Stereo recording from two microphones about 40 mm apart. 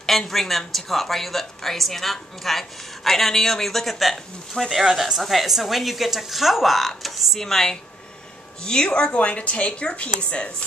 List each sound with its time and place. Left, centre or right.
0.3 s a woman's voice: centre
8.6 s a woman's voice: left